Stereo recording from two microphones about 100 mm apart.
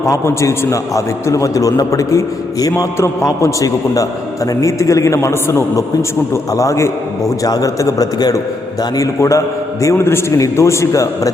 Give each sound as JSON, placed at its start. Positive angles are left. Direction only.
{"t": 0.0, "sound": "a man's voice", "side_deg": 30}